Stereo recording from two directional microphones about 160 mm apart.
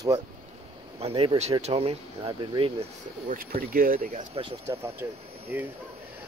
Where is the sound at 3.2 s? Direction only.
60° right (ahead or behind).